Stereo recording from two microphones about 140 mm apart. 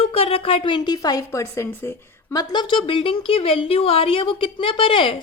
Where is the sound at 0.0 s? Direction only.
45° left (ahead or behind); by 1.9 s 20° left (ahead or behind).